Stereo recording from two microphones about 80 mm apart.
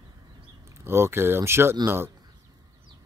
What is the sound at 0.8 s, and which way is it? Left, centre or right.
Speech, right.